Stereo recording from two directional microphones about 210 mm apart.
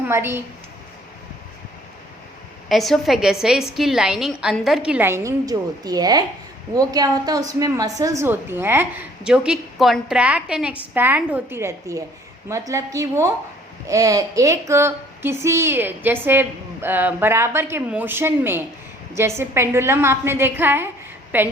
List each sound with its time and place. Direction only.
0.1 s a woman's voice: 10° right (ahead or behind)
2.6 s a woman's voice: centre (ahead or behind)